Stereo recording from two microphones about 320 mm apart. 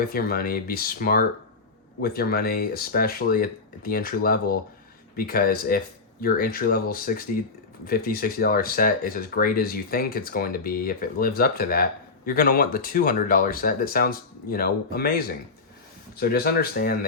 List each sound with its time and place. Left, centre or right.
0.1 s speech: left